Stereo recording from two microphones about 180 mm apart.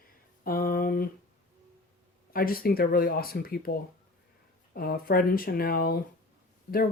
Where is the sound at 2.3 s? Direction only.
55° left (ahead or behind).